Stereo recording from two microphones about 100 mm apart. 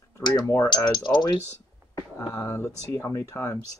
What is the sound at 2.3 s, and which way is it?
Speech, 25° left (ahead or behind).